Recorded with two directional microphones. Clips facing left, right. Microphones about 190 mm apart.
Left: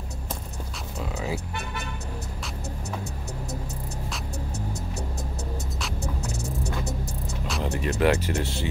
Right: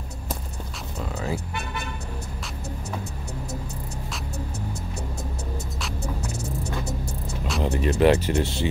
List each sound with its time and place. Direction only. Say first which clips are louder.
0.9 s music: right 1 dB; 5° left (ahead or behind)
4.1 s music: right 2 dB; 10° right (ahead or behind)
7.6 s music: right 4 dB; 25° right (ahead or behind)